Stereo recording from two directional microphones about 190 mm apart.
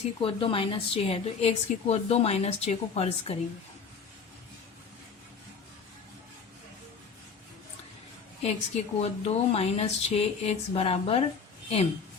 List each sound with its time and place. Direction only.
0.2 s a woman's voice: 30° left (ahead or behind)
8.4 s a woman's voice: 35° left (ahead or behind)